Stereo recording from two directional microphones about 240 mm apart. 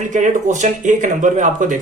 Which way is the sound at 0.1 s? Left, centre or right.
Right.